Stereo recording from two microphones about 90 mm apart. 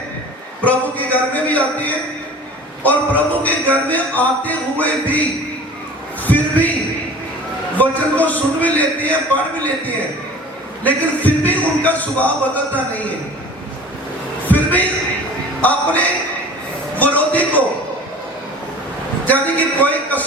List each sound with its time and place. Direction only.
0.6 s speech: 15° left (ahead or behind)
6.2 s a sound: 20° left (ahead or behind)
7.8 s speech: 20° left (ahead or behind)
14.4 s a sound: 20° left (ahead or behind)
15.6 s a man's voice: 15° left (ahead or behind)
19.2 s a man's voice: 20° left (ahead or behind)